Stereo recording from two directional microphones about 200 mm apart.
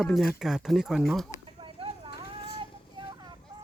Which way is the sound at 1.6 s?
25° right (ahead or behind).